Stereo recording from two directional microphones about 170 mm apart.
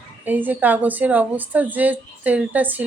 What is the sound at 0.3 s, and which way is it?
A woman's voice, 10° right (ahead or behind).